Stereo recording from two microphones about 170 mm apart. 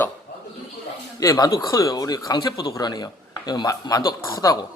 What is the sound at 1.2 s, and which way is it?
Speech, 20° left (ahead or behind).